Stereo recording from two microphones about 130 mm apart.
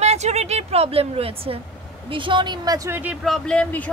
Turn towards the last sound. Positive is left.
turn(degrees=10)  # may be behind; listen again after turning